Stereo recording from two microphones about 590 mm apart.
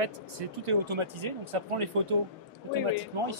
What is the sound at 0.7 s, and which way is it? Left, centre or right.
Speech, right.